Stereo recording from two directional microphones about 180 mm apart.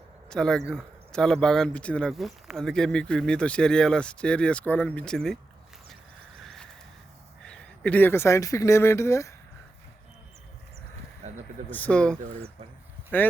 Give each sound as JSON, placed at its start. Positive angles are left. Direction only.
{"t": 0.3, "sound": "speech", "side_deg": 5}
{"t": 6.4, "sound": "a sound", "side_deg": 5}
{"t": 7.4, "sound": "speech", "side_deg": 5}
{"t": 11.7, "sound": "speech", "side_deg": 5}